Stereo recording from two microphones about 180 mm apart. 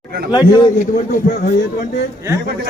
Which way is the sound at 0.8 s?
50° left (ahead or behind).